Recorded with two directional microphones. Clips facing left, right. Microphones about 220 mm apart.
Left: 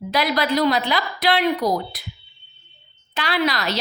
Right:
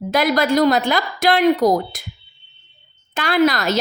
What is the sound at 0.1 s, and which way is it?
A woman's voice, 50° right (ahead or behind).